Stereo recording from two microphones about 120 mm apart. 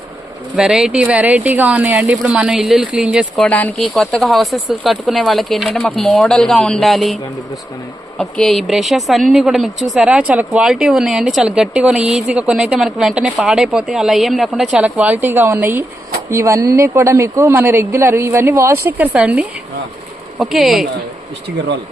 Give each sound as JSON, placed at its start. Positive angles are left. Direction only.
{"t": 0.5, "sound": "speech", "side_deg": -5}
{"t": 3.4, "sound": "speech", "side_deg": 15}
{"t": 3.8, "sound": "speech", "side_deg": 0}
{"t": 8.2, "sound": "a man's voice", "side_deg": 0}